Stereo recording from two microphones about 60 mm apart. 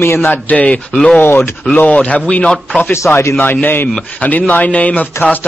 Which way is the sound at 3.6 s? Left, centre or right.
Left.